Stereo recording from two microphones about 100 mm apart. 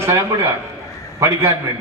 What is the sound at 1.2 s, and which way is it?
Speech, 30° right (ahead or behind).